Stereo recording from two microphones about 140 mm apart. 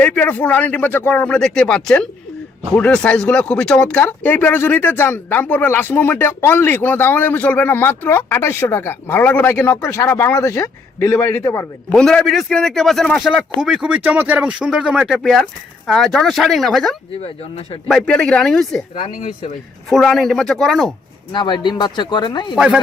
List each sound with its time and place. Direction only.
0.0 s speech: 10° left (ahead or behind)
11.9 s a man's voice: 5° left (ahead or behind)
17.2 s speech: 45° left (ahead or behind)
17.8 s a man's voice: centre (ahead or behind)
19.9 s a man's voice: centre (ahead or behind)
21.3 s speech: 35° left (ahead or behind)
22.5 s a man's voice: 5° right (ahead or behind)